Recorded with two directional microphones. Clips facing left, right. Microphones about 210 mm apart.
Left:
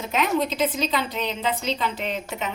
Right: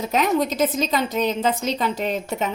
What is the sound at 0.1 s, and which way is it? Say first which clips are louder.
A woman's voice: right 2 dB; 40° right (ahead or behind).